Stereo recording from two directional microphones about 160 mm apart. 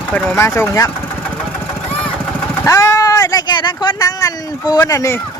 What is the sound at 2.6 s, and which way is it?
Speech, 20° left (ahead or behind).